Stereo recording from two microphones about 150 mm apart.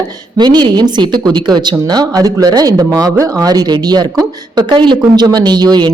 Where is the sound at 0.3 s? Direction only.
30° right (ahead or behind).